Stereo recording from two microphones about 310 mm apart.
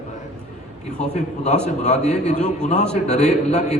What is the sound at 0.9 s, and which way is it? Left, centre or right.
A man's voice, left.